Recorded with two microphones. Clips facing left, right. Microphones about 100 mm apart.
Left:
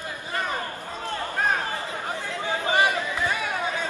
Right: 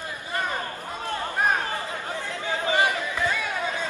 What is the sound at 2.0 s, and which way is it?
Chatter, 20° left (ahead or behind).